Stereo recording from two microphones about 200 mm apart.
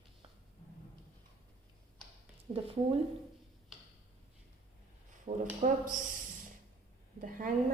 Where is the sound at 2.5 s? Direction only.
30° right (ahead or behind).